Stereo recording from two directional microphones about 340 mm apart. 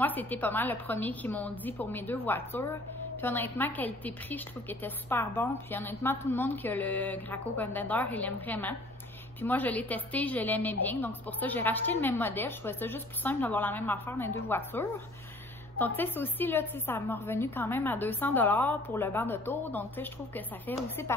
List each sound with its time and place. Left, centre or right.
0.0 s a woman's voice: centre